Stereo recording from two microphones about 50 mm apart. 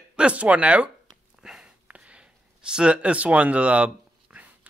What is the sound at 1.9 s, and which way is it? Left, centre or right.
Speech, right.